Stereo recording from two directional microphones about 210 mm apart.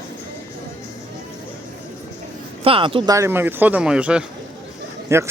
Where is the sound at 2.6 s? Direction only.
25° right (ahead or behind).